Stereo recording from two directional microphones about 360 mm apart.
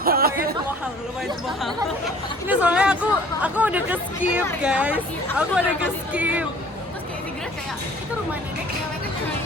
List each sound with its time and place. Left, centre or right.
0.0 s chatter: right
1.6 s speech: centre